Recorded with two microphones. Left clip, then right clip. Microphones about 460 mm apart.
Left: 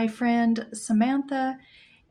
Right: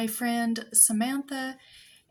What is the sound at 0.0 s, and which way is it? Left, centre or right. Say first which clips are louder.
Speech: left 4 dB; right.